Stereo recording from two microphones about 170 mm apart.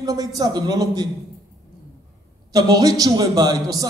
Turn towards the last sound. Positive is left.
turn(degrees=-20)  # may be behind; listen again after turning